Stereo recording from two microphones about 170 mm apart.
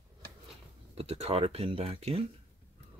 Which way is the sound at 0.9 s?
35° right (ahead or behind).